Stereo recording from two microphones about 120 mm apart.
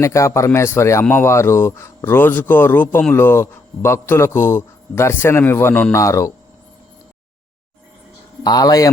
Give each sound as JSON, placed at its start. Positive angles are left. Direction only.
{"t": 0.0, "sound": "speech", "side_deg": 25}
{"t": 8.4, "sound": "a man's voice", "side_deg": 35}